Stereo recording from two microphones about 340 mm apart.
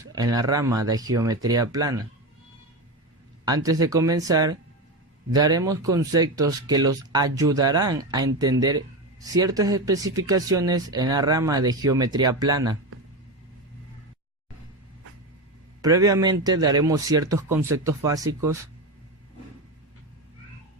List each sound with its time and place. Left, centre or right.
0.0 s a man's voice: centre
3.4 s a man's voice: centre
15.8 s a man's voice: centre